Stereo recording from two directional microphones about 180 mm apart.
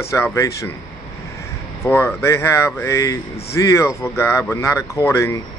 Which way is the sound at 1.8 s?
15° left (ahead or behind).